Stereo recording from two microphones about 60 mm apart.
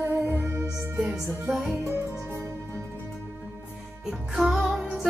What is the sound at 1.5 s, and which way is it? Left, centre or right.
Speech, centre.